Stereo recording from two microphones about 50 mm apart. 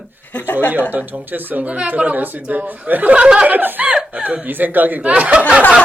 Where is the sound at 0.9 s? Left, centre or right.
Right.